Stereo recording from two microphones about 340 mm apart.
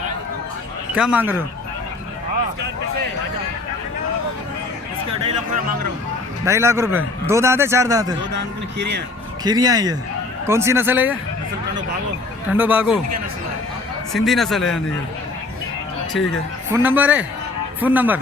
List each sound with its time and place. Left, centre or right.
0.9 s a man's voice: centre
6.4 s a man's voice: centre
8.8 s speech: right
9.4 s a man's voice: centre
12.5 s a man's voice: centre
14.1 s a man's voice: centre
16.7 s a man's voice: centre